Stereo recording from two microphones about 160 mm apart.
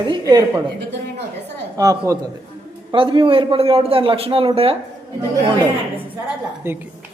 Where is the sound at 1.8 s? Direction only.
20° right (ahead or behind).